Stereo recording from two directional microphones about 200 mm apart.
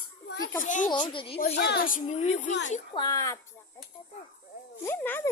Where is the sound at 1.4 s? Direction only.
45° left (ahead or behind).